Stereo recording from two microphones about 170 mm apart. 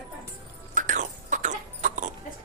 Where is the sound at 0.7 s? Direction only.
50° right (ahead or behind).